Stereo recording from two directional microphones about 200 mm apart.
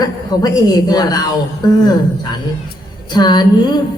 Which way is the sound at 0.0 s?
20° left (ahead or behind).